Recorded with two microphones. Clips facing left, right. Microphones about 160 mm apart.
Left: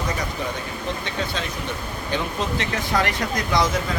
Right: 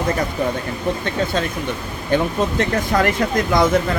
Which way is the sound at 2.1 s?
50° right (ahead or behind).